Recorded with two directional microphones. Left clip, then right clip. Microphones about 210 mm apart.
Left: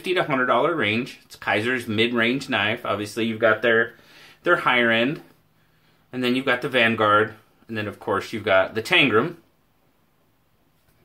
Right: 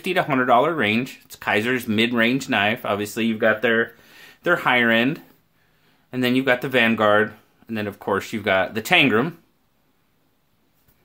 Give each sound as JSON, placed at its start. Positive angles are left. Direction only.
{"t": 0.0, "sound": "speech", "side_deg": -50}